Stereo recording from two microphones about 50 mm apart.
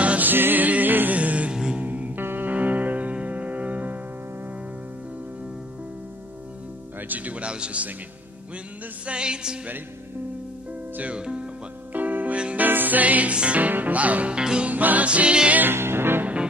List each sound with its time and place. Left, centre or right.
0.0 s music: right
0.3 s music: right
1.5 s mantra: centre
1.8 s music: right
7.1 s speech: right
9.0 s speech: centre
11.1 s speech: centre
11.9 s music: right
14.4 s music: centre
14.7 s music: right
15.0 s music: right
15.6 s music: right